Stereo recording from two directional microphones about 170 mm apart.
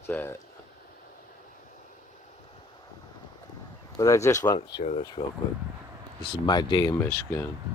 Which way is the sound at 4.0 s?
20° left (ahead or behind).